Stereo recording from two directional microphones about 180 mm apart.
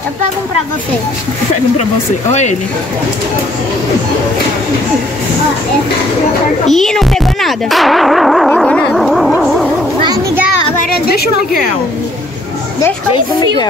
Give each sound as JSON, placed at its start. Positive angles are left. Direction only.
{"t": 6.7, "sound": "speech", "side_deg": 0}
{"t": 10.8, "sound": "a woman's voice", "side_deg": 55}
{"t": 13.1, "sound": "speech", "side_deg": 25}